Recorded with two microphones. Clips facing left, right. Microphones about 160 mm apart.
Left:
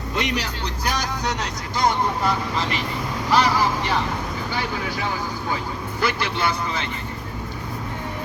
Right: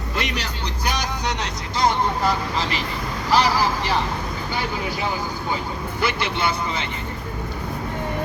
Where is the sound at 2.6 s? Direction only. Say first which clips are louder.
Even; 30° right (ahead or behind).